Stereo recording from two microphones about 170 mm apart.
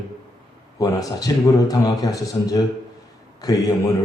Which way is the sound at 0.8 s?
20° left (ahead or behind).